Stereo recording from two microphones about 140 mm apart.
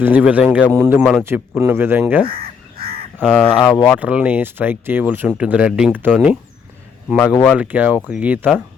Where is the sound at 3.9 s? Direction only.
10° right (ahead or behind).